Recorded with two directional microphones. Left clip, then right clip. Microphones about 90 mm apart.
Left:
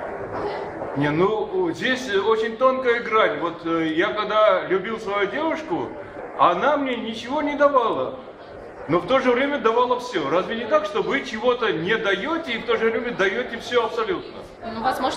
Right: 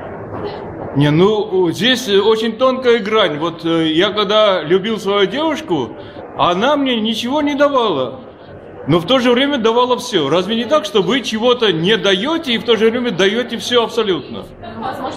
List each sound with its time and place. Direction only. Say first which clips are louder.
0.9 s a man's voice: right 8 dB; 25° right (ahead or behind)